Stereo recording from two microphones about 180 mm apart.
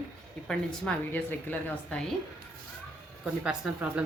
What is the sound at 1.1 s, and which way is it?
Speech, 10° left (ahead or behind).